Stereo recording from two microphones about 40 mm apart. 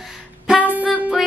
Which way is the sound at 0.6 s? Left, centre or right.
Right.